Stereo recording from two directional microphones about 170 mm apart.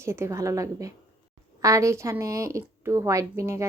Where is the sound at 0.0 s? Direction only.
15° right (ahead or behind).